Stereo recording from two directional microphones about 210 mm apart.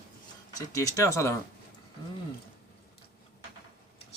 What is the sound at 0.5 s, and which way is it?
Speech, 15° left (ahead or behind).